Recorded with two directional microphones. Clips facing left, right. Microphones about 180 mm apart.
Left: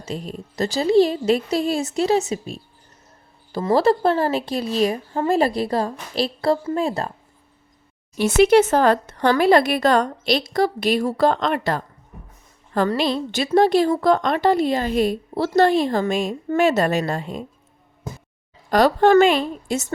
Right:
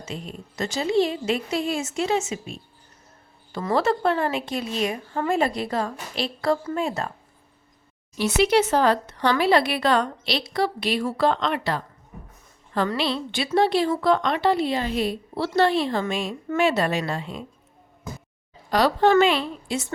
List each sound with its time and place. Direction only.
0.0 s a woman's voice: 35° left (ahead or behind)
8.2 s a woman's voice: 50° left (ahead or behind)
18.7 s a woman's voice: 50° left (ahead or behind)